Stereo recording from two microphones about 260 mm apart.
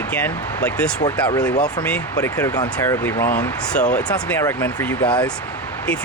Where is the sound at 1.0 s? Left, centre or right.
Centre.